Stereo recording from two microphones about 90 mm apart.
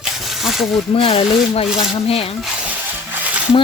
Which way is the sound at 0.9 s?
90° left.